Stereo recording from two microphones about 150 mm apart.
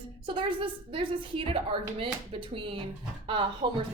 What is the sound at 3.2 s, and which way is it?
Speech, 35° right (ahead or behind).